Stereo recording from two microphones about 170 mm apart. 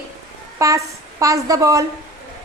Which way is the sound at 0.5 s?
20° right (ahead or behind).